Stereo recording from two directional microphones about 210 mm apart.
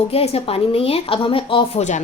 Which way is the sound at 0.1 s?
30° left (ahead or behind).